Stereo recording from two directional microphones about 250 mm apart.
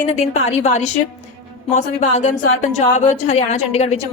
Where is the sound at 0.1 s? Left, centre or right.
Left.